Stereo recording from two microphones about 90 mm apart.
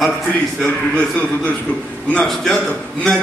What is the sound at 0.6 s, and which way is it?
A man's voice, 15° left (ahead or behind).